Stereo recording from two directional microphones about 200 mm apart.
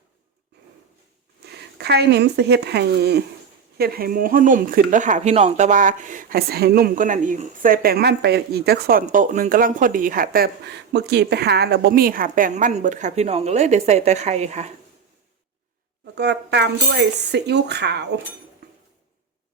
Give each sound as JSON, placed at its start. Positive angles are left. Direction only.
{"t": 1.5, "sound": "speech", "side_deg": -55}
{"t": 16.1, "sound": "speech", "side_deg": -55}